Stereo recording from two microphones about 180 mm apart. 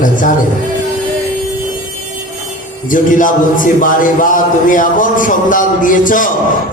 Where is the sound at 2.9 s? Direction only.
45° left (ahead or behind).